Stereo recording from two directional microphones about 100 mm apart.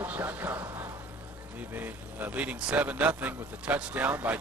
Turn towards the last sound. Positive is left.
turn(degrees=-15)  # may be behind; listen again after turning